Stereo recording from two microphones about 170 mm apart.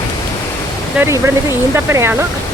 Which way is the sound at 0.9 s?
15° right (ahead or behind).